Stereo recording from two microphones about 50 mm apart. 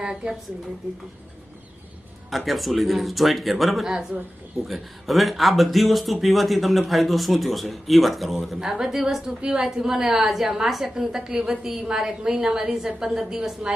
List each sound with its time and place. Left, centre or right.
0.0 s a woman's voice: centre
2.3 s speech: centre
8.5 s a woman's voice: centre